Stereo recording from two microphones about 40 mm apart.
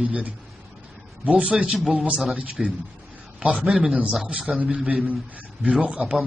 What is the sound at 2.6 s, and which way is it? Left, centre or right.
Speech, centre.